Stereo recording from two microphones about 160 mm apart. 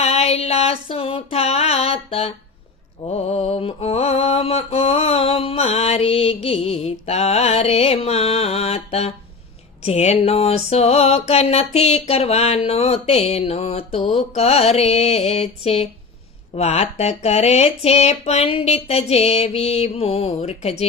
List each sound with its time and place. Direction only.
0.0 s a sound: 40° left (ahead or behind)
3.0 s mantra: 40° left (ahead or behind)
9.8 s music: 40° left (ahead or behind)